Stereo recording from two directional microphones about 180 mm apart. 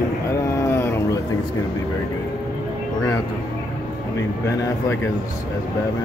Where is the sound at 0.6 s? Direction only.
15° left (ahead or behind).